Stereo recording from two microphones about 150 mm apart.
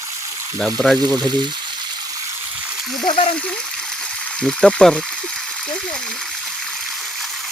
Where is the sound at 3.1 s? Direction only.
35° left (ahead or behind).